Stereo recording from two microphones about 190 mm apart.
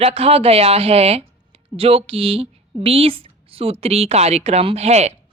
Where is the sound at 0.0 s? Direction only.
30° right (ahead or behind).